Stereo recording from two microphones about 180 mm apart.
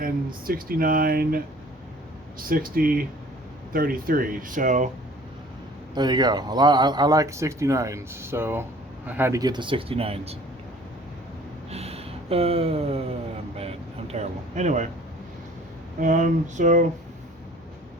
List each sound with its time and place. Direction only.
0.0 s speech: 55° right (ahead or behind)
2.4 s speech: 55° right (ahead or behind)
5.9 s speech: 25° right (ahead or behind)
11.7 s a sound: 35° right (ahead or behind)
16.0 s speech: 45° right (ahead or behind)